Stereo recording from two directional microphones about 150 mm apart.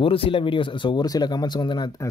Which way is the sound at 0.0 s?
40° left (ahead or behind).